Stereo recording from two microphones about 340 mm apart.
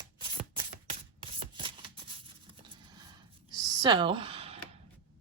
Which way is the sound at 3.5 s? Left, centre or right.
Centre.